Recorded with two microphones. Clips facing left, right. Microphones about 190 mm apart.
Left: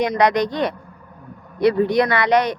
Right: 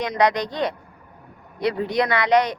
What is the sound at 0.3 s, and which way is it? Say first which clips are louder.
A man's voice: left 4 dB; 65° left (ahead or behind).